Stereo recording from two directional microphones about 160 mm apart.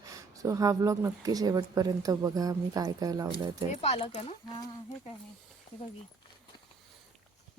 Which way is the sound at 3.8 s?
40° left (ahead or behind).